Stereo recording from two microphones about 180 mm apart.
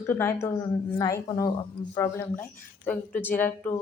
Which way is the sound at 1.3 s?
25° left (ahead or behind).